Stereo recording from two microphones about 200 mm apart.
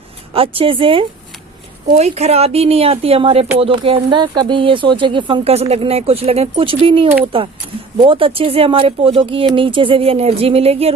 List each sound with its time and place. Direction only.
0.3 s speech: 25° right (ahead or behind)